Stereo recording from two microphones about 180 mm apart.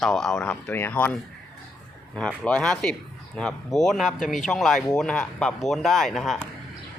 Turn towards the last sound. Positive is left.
turn(degrees=0)  # may be behind; listen again after turning